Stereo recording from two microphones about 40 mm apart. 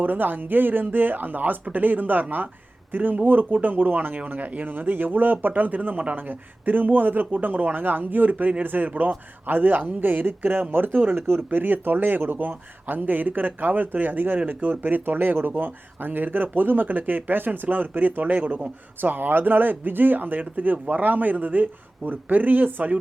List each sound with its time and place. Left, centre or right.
0.0 s speech: right
6.1 s speech: right
11.1 s speech: right
11.5 s speech: right
18.2 s speech: right
18.9 s speech: right